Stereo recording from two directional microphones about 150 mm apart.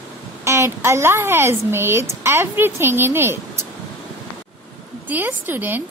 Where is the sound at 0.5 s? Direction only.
15° right (ahead or behind).